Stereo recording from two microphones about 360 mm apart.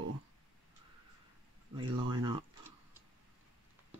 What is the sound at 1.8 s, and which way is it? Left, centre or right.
Speech, centre.